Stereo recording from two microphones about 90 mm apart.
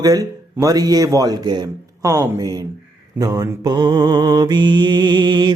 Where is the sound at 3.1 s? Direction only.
40° right (ahead or behind).